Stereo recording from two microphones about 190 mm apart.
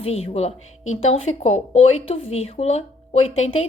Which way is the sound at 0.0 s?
30° left (ahead or behind).